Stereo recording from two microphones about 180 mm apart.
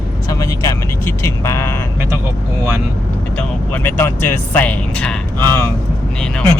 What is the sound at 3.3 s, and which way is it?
Speech, 10° left (ahead or behind).